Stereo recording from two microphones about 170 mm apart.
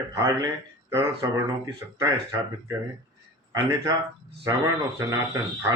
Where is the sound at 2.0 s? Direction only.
15° right (ahead or behind).